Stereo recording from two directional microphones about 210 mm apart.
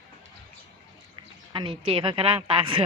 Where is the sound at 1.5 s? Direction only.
25° right (ahead or behind).